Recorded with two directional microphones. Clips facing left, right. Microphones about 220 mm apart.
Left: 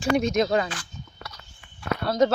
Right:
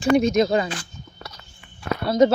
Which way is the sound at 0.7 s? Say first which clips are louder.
Right 4 dB; 25° right (ahead or behind).